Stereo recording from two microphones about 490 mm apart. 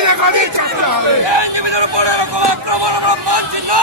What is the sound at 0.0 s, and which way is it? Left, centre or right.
Speech, right.